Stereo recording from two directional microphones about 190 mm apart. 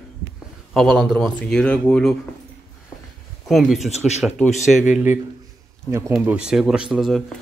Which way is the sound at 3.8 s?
35° left (ahead or behind).